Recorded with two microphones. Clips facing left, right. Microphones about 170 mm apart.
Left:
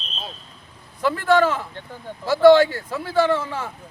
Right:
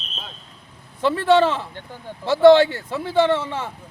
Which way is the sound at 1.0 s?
25° right (ahead or behind).